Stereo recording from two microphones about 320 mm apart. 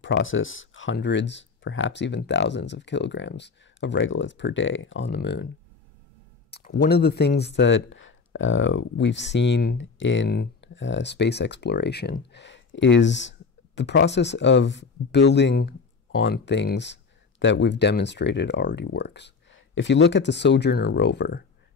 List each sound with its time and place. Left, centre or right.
0.0 s speech: left
6.5 s speech: left